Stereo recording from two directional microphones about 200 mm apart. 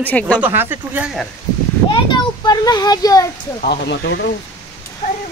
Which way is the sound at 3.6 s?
55° left (ahead or behind).